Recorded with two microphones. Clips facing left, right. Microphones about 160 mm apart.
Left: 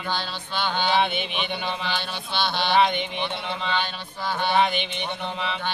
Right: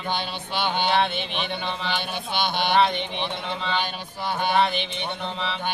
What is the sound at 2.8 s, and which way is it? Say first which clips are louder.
Speech: left 1 dB; 5° left (ahead or behind).